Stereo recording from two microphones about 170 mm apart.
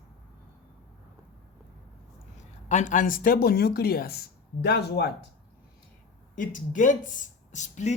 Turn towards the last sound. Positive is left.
turn(degrees=45)  # may be behind; listen again after turning